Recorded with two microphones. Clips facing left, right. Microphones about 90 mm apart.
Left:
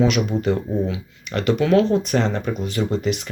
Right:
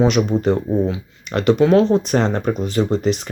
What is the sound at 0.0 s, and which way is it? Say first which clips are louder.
Speech: right 3 dB; 35° right (ahead or behind).